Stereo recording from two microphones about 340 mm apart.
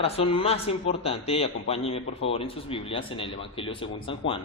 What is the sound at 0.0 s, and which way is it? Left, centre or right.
A man's voice, centre.